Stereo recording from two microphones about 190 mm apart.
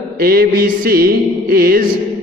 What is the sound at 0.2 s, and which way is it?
A man's voice, 50° right (ahead or behind).